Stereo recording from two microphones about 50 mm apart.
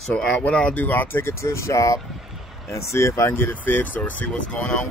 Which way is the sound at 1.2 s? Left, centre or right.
Left.